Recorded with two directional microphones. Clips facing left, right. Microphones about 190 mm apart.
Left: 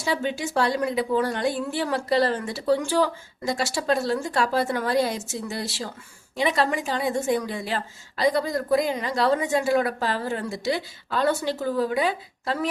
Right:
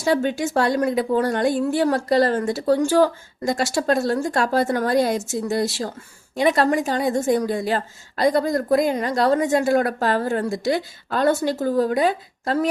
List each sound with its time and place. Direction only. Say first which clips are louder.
0.0 s a woman's voice: right 6 dB; 50° right (ahead or behind)